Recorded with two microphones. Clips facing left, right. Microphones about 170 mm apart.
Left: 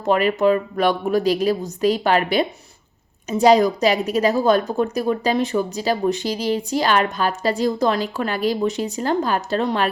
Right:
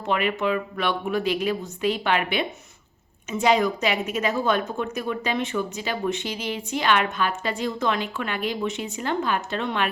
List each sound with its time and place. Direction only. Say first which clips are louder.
0.0 s a woman's voice: left 7 dB; 40° left (ahead or behind)